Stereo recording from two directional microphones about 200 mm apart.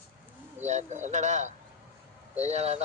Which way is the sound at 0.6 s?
35° right (ahead or behind).